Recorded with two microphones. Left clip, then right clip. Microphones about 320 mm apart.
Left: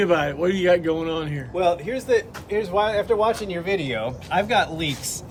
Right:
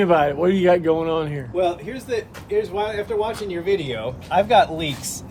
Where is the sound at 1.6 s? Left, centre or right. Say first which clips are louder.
Left 1 dB; centre.